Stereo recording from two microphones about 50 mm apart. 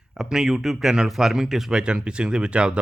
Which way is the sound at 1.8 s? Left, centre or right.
Centre.